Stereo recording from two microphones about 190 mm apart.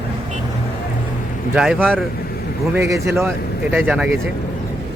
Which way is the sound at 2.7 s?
15° right (ahead or behind).